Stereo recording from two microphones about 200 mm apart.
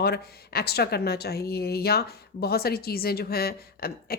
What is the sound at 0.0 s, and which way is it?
Speech, 50° left (ahead or behind).